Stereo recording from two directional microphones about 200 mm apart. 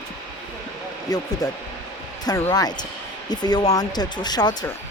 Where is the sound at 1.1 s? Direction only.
20° left (ahead or behind).